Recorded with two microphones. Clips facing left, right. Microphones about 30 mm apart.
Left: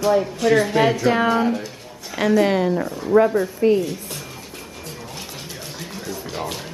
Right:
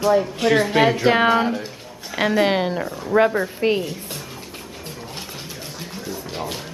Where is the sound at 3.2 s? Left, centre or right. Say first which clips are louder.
Left 1 dB; right.